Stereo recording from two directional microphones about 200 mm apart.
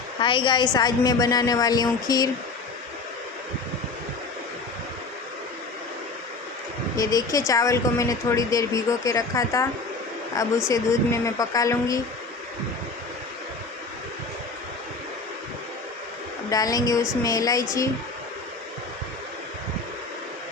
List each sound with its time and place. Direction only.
0.2 s a woman's voice: 25° left (ahead or behind)
6.9 s a woman's voice: 20° left (ahead or behind)
16.5 s a woman's voice: 20° left (ahead or behind)